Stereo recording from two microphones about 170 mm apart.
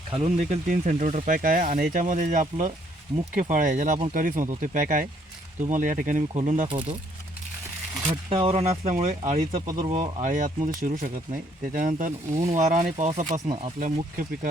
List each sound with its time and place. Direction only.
0.1 s speech: 40° right (ahead or behind)
8.0 s speech: 35° right (ahead or behind)
9.6 s speech: 25° right (ahead or behind)
10.2 s speech: 45° right (ahead or behind)